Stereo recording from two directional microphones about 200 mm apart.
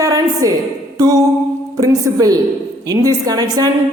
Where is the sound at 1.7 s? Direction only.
20° right (ahead or behind).